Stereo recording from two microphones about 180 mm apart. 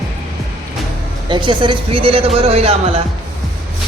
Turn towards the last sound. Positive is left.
turn(degrees=-35)  # may be behind; listen again after turning